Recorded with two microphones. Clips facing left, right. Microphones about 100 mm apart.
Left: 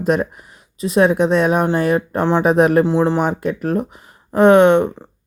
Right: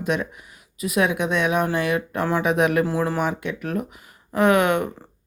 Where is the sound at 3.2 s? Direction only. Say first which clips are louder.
Left 6 dB; 35° left (ahead or behind).